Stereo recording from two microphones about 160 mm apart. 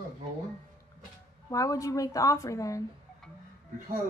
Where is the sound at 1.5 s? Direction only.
20° left (ahead or behind).